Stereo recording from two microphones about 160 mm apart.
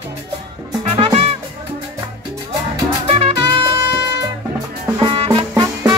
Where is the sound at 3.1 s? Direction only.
40° right (ahead or behind).